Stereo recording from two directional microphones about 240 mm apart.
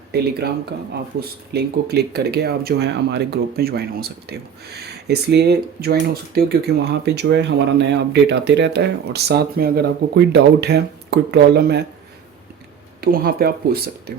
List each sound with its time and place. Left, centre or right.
0.1 s speech: right
13.0 s speech: right